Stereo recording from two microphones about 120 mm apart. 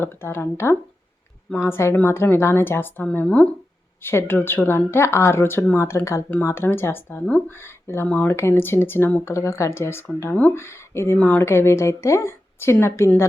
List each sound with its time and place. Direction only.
0.0 s speech: 20° left (ahead or behind)
4.0 s speech: 20° left (ahead or behind)